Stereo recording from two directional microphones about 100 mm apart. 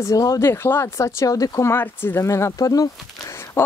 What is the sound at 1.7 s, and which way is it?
Speech, 20° left (ahead or behind).